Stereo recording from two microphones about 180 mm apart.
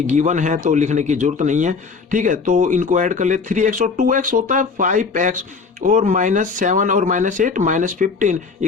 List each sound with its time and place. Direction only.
0.1 s speech: 45° right (ahead or behind)